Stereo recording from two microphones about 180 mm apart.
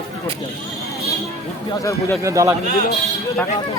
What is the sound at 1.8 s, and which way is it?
Speech, 15° left (ahead or behind).